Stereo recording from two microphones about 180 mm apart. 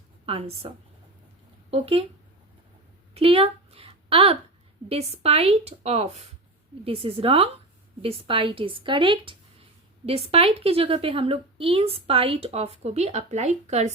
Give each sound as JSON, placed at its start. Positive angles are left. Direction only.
{"t": 0.3, "sound": "a woman's voice", "side_deg": -35}
{"t": 1.7, "sound": "a woman's voice", "side_deg": -35}
{"t": 3.2, "sound": "a woman's voice", "side_deg": -35}